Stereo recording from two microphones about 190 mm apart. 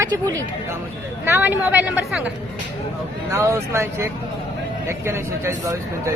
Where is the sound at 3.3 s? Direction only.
15° right (ahead or behind).